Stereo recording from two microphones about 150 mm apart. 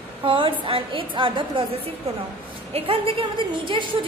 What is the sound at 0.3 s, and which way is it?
A woman's voice, 35° right (ahead or behind).